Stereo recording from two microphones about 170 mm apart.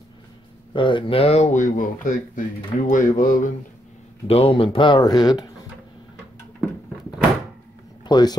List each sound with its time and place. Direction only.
0.7 s speech: 30° left (ahead or behind); by 3.5 s 55° left (ahead or behind)
4.3 s speech: 35° left (ahead or behind)
8.0 s speech: 25° left (ahead or behind)